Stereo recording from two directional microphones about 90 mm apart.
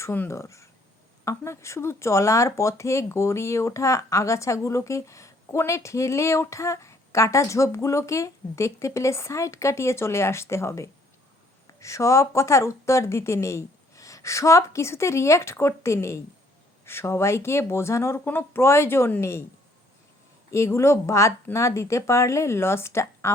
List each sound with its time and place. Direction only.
0.0 s speech: 30° left (ahead or behind)
20.5 s speech: 30° left (ahead or behind)